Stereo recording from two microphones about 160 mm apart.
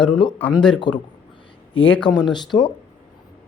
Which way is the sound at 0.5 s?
5° left (ahead or behind).